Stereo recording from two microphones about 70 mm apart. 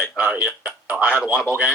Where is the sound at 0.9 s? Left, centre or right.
Centre.